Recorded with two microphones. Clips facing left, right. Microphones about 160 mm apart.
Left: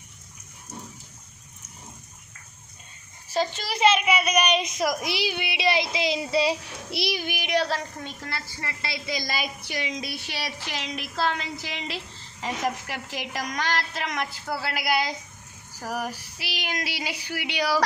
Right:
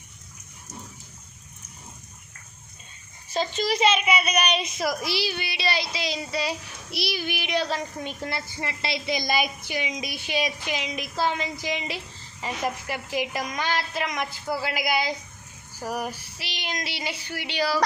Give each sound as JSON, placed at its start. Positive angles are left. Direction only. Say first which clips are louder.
{"t": 3.3, "sound": "female singing", "louder": "right 2 dB", "side_deg": 10}
{"t": 4.6, "sound": "a woman's voice", "louder": "left 1 dB", "side_deg": 10}
{"t": 7.7, "sound": "a woman's voice", "louder": "right 1 dB", "side_deg": -15}
{"t": 15.9, "sound": "female singing", "louder": "even", "side_deg": 10}